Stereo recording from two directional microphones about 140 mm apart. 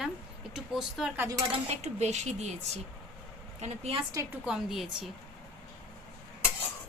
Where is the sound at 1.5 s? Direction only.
50° right (ahead or behind).